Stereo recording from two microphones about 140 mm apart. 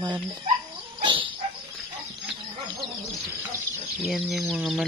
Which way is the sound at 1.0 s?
35° right (ahead or behind).